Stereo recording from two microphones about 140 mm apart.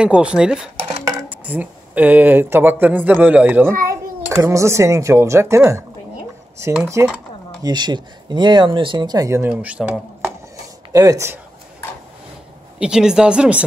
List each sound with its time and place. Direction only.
0.0 s speech: 10° right (ahead or behind)
7.6 s speech: 30° right (ahead or behind); by 10.3 s 10° right (ahead or behind)
10.9 s speech: 25° right (ahead or behind)
12.7 s speech: 5° right (ahead or behind)